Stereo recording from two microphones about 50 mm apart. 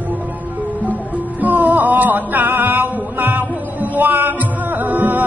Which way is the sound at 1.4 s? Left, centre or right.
Right.